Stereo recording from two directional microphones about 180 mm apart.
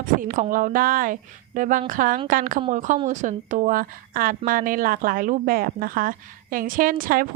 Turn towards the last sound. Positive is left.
turn(degrees=-50)  # may be behind; listen again after turning